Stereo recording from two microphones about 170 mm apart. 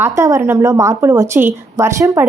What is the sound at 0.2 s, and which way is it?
A woman's voice, 15° right (ahead or behind).